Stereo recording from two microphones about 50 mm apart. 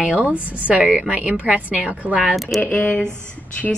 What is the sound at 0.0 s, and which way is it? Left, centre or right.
A woman's voice, right.